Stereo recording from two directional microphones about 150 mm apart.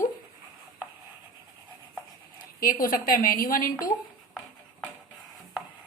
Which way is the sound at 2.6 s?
65° left (ahead or behind).